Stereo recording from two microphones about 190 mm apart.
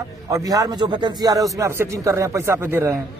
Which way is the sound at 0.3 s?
20° right (ahead or behind).